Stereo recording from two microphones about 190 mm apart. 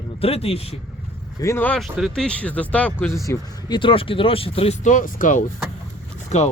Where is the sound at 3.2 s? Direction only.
25° left (ahead or behind).